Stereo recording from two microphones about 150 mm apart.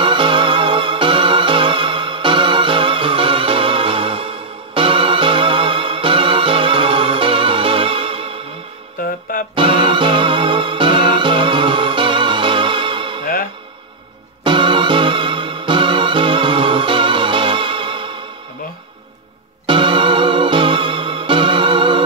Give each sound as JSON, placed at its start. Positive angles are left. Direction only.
{"t": 0.0, "sound": "music", "side_deg": -35}
{"t": 9.6, "sound": "music", "side_deg": -35}
{"t": 14.4, "sound": "music", "side_deg": -35}
{"t": 19.6, "sound": "music", "side_deg": -35}